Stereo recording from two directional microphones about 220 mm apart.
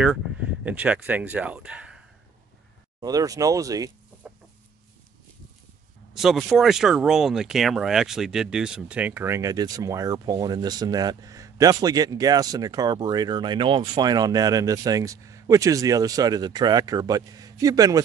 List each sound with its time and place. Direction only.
0.7 s speech: 5° right (ahead or behind)
3.0 s speech: 15° right (ahead or behind)
6.1 s speech: centre (ahead or behind); by 18.0 s 15° right (ahead or behind)